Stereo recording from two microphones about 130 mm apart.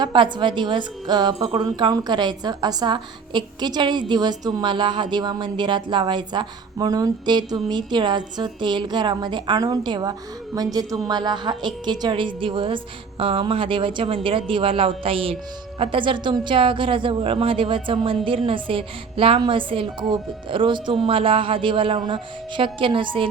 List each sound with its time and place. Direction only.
0.0 s a woman's voice: 35° right (ahead or behind)